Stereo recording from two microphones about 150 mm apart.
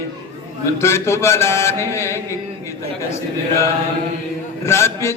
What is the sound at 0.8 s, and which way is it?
Speech, 15° left (ahead or behind).